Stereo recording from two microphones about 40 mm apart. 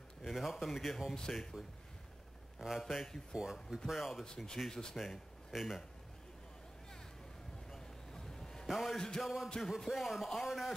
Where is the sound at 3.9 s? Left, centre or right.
Centre.